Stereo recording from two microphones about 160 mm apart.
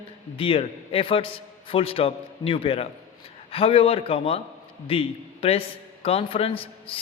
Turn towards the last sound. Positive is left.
turn(degrees=35)  # may be behind; listen again after turning